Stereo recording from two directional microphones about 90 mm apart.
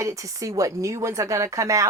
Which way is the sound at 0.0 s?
35° right (ahead or behind).